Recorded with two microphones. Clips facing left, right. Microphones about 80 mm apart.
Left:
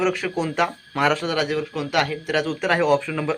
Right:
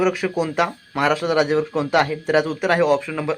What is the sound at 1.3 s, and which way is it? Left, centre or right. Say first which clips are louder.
A man's voice: right 5 dB; right.